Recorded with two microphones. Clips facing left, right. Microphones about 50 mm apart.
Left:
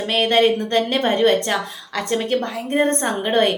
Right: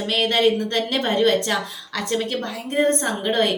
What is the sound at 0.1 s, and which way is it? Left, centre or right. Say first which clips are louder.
A woman's voice: left 3 dB; left.